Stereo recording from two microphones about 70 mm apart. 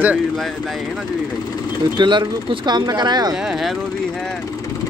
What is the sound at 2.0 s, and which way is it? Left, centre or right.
Speech, right.